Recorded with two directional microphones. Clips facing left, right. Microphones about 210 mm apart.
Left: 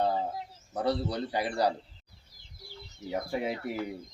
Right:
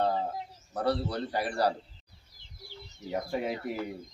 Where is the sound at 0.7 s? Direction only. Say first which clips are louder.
Even; 15° left (ahead or behind).